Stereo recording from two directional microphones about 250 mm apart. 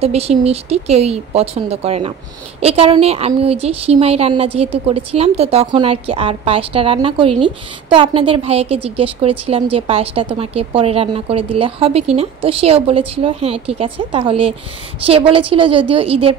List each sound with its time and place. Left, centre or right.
0.0 s a woman's voice: right